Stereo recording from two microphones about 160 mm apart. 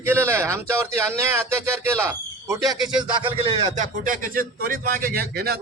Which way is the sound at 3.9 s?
60° right (ahead or behind).